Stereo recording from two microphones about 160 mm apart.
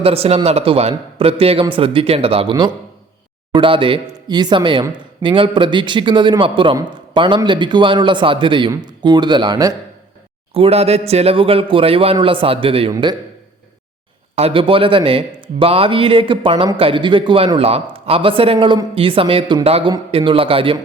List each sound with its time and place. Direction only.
0.0 s speech: 40° right (ahead or behind)
10.5 s speech: 35° right (ahead or behind)
14.3 s speech: 35° right (ahead or behind)